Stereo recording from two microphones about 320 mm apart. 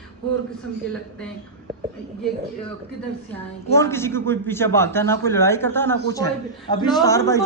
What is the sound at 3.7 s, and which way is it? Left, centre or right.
A man's voice, centre.